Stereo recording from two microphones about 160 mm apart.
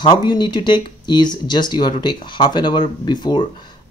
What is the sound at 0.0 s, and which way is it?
Speech, 30° left (ahead or behind).